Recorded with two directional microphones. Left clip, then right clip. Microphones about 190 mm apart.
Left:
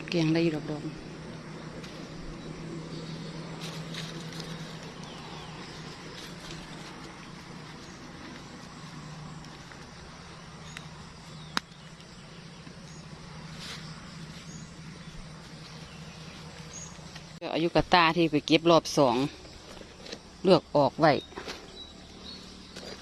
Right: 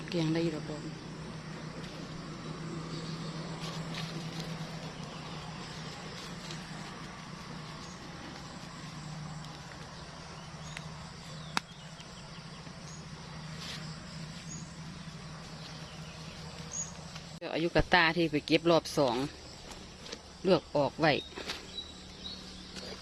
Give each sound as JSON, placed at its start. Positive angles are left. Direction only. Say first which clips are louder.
{"t": 0.1, "sound": "a woman's voice", "louder": "left 6 dB", "side_deg": 35}
{"t": 17.4, "sound": "speech", "louder": "left 4 dB", "side_deg": 20}
{"t": 20.4, "sound": "speech", "louder": "left 6 dB", "side_deg": 30}